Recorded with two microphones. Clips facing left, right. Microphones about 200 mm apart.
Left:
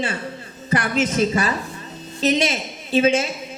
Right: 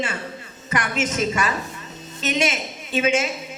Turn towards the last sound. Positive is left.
turn(degrees=35)  # may be behind; listen again after turning